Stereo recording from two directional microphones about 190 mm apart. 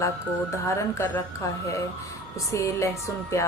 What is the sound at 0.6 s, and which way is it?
Speech, 15° left (ahead or behind).